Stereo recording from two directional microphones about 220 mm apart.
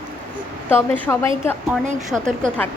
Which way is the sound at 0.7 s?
10° left (ahead or behind).